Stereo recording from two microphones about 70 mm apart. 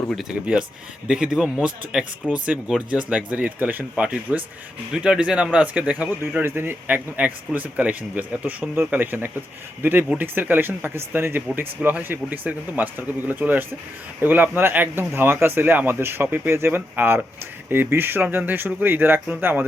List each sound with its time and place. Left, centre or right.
1.0 s speech: centre; by 16.8 s right
16.9 s speech: right